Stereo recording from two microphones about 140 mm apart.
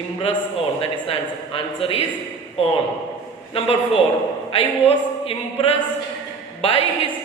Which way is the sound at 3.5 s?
45° left (ahead or behind).